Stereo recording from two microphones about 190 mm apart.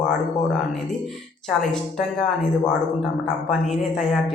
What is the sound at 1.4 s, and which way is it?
Speech, centre (ahead or behind).